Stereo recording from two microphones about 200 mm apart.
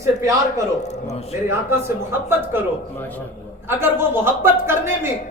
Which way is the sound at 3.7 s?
10° right (ahead or behind).